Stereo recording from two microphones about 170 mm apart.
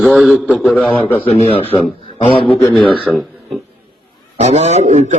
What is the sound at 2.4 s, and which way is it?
Speech, 5° left (ahead or behind).